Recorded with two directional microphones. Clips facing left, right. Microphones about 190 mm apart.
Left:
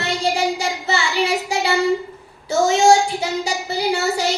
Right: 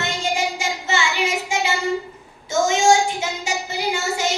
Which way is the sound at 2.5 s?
35° left (ahead or behind).